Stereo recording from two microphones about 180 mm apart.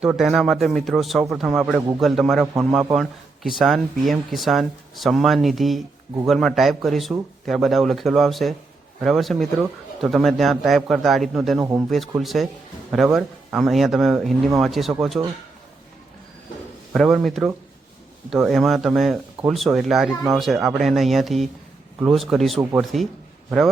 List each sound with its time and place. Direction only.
0.0 s speech: 5° right (ahead or behind)
11.6 s speech: 15° right (ahead or behind)
11.9 s speech: centre (ahead or behind)
16.9 s speech: centre (ahead or behind)